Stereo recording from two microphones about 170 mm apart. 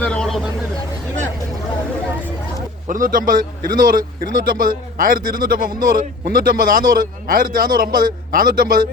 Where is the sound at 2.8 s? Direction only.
50° right (ahead or behind).